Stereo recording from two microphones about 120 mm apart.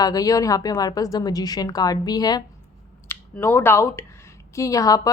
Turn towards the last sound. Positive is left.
turn(degrees=30)  # may be behind; listen again after turning